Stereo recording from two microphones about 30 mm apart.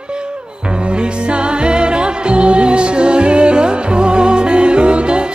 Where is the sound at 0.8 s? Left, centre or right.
Right.